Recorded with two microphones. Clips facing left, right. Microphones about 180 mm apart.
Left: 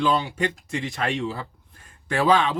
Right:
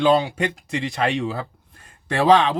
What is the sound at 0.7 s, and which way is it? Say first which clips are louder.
Speech: right 4 dB; 65° right (ahead or behind).